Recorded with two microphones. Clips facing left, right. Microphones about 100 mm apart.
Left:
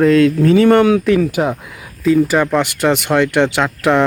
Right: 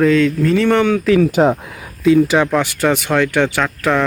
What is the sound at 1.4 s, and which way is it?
Speech, 30° right (ahead or behind).